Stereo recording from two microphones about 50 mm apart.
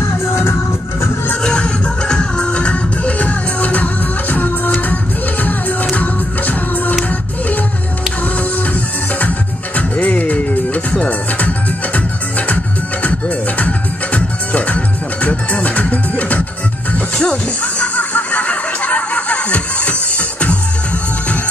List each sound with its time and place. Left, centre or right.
0.0 s music: left
1.3 s music: centre; by 7.0 s left
9.8 s music: left
13.6 s music: left